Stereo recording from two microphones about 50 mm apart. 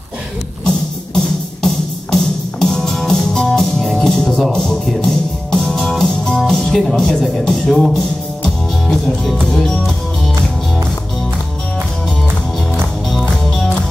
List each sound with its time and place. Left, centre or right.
0.7 s music: centre
4.5 s speech: centre
4.8 s music: centre
6.5 s speech: centre
8.8 s music: centre